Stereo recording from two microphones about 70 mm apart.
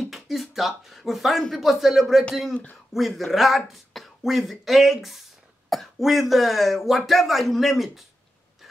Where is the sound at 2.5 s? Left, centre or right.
Left.